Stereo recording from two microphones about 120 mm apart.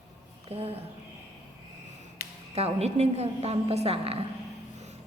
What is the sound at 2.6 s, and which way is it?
A woman's voice, 60° right (ahead or behind).